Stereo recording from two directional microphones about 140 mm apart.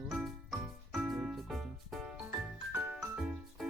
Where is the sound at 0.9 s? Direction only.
Centre (ahead or behind).